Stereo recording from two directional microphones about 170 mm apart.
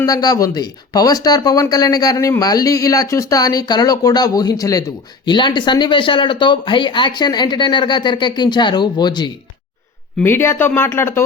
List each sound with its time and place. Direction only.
0.0 s speech: 20° left (ahead or behind)
10.2 s speech: 15° left (ahead or behind)